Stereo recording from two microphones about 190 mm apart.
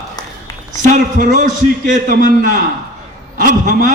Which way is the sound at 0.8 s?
40° right (ahead or behind).